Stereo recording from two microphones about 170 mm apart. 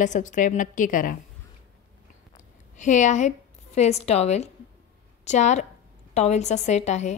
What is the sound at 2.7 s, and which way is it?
A woman's voice, 45° left (ahead or behind).